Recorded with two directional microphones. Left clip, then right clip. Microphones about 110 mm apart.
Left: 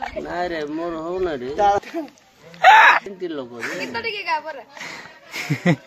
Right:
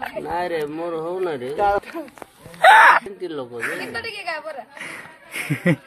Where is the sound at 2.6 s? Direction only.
35° right (ahead or behind).